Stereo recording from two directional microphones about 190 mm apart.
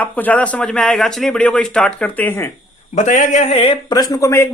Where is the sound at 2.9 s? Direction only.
40° left (ahead or behind); by 4.4 s 15° left (ahead or behind).